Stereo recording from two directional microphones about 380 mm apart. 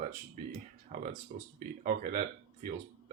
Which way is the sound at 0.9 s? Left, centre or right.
Centre.